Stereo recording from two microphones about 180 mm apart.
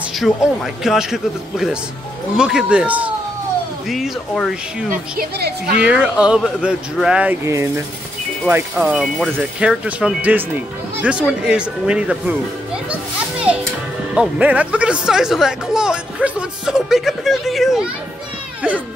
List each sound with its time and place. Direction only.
0.1 s speech: centre (ahead or behind)
5.2 s a woman's voice: 60° right (ahead or behind)
5.8 s speech: 5° right (ahead or behind)